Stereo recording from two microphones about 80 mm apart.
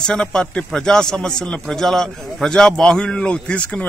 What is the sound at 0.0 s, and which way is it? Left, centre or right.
A man's voice, centre.